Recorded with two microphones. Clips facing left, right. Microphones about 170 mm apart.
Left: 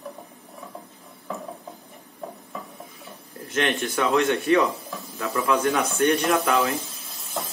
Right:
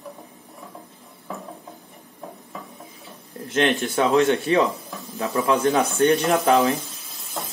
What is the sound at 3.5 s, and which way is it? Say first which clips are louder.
A man's voice: right 4 dB; 30° right (ahead or behind).